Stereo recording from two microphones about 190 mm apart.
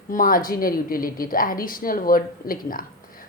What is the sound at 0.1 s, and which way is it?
A woman's voice, 45° left (ahead or behind).